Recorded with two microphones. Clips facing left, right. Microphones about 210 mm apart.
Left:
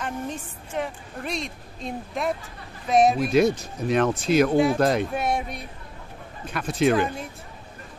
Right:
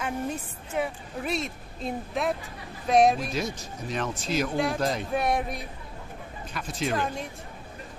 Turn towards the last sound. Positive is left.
turn(degrees=65)  # may be behind; listen again after turning